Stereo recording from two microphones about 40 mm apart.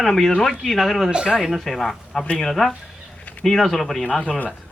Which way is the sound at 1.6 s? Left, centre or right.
Centre.